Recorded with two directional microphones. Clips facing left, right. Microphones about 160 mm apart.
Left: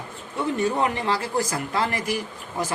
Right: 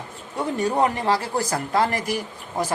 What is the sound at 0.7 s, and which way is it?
Speech, 35° right (ahead or behind).